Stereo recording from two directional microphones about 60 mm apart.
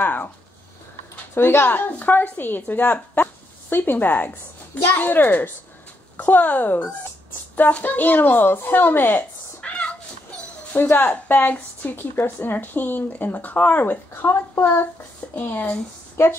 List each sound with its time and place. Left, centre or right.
0.0 s speech: left
9.6 s cat: centre
10.7 s speech: left
16.2 s a woman's voice: left